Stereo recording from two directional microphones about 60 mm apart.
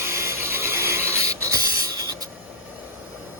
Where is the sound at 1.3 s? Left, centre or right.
Right.